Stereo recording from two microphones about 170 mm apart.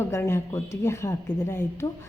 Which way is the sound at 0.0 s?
15° left (ahead or behind).